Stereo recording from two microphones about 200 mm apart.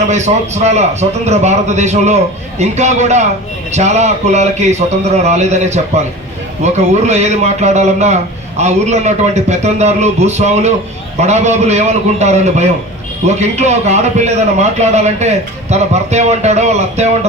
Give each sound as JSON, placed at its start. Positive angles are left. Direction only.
{"t": 0.1, "sound": "a man's voice", "side_deg": -35}